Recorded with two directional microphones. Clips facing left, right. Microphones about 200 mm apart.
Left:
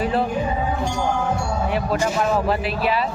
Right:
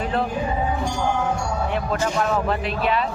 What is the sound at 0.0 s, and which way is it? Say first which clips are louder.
Music: left 3 dB; 5° left (ahead or behind).